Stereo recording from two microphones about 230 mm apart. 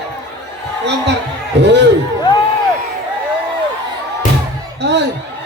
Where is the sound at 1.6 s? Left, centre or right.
Right.